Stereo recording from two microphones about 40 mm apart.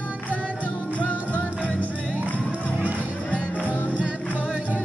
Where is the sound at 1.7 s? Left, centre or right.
Right.